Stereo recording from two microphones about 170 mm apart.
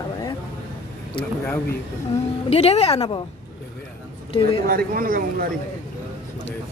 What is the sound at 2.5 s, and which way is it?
Speech, 35° left (ahead or behind).